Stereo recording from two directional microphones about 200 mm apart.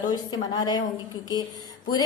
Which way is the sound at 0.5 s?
20° left (ahead or behind).